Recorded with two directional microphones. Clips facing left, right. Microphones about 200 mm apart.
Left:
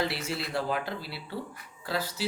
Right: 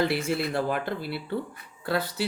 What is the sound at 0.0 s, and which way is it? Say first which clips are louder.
Speech: right 6 dB; 55° right (ahead or behind).